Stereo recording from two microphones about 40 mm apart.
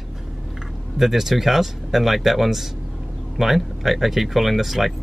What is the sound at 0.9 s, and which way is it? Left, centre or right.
Speech, centre.